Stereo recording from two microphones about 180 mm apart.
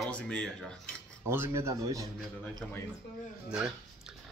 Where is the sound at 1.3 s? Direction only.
15° right (ahead or behind).